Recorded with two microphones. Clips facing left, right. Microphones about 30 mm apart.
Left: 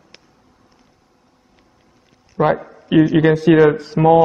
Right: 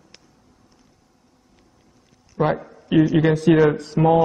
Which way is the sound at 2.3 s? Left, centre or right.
Centre.